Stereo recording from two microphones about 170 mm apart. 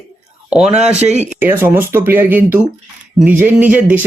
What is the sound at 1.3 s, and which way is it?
Speech, 10° right (ahead or behind).